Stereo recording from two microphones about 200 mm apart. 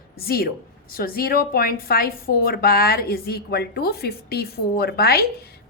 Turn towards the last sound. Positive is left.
turn(degrees=50)  # may be behind; listen again after turning